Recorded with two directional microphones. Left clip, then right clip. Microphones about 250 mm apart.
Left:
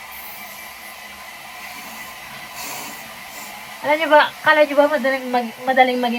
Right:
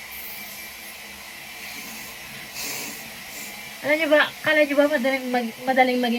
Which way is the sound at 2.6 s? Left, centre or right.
Centre.